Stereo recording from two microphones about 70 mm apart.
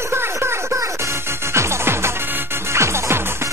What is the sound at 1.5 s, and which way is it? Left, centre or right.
Music, right.